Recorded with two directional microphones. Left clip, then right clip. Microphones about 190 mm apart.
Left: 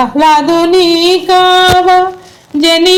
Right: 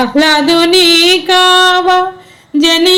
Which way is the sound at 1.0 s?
Centre (ahead or behind).